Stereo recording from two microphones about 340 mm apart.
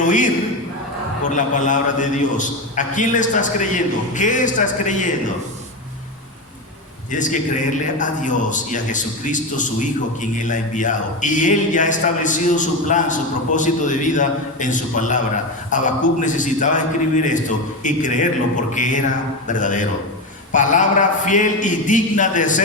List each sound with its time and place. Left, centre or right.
0.0 s a man's voice: left
1.3 s a man's voice: left
7.1 s a man's voice: left